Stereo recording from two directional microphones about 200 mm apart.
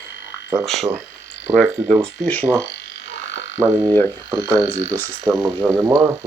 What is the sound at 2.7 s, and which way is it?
Frog, 60° left (ahead or behind).